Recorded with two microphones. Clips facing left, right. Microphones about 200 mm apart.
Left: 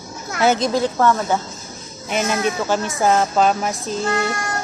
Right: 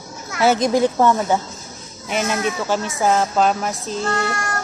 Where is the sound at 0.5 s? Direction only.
15° right (ahead or behind).